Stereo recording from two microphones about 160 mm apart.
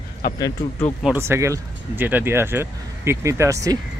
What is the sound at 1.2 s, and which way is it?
Speech, 15° right (ahead or behind).